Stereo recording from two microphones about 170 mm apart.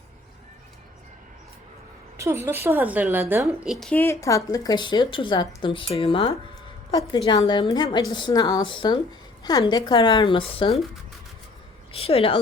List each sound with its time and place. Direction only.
2.1 s a woman's voice: 15° right (ahead or behind)
3.7 s a woman's voice: centre (ahead or behind)
4.0 s a woman's voice: 15° left (ahead or behind); by 10.8 s 35° left (ahead or behind)
11.9 s a woman's voice: 35° left (ahead or behind)